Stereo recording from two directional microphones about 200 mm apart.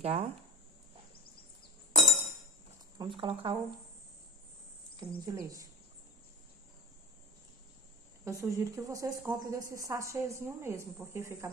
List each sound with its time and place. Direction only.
0.0 s speech: 30° right (ahead or behind)
3.0 s speech: 25° right (ahead or behind)
4.9 s speech: 20° right (ahead or behind)
8.3 s speech: 15° right (ahead or behind)